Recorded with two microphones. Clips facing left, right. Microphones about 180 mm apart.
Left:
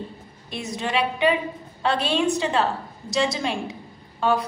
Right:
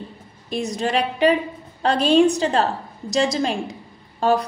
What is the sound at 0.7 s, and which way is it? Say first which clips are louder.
A woman's voice: right 2 dB; 40° right (ahead or behind).